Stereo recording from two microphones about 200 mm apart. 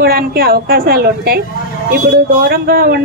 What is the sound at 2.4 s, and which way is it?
Speech, 50° right (ahead or behind).